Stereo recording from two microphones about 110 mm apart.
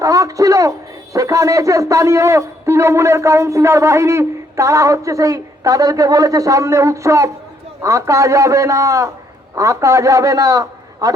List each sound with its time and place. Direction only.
0.0 s a man's voice: 30° right (ahead or behind)